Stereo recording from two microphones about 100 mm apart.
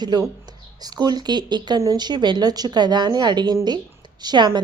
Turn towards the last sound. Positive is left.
turn(degrees=-45)  # may be behind; listen again after turning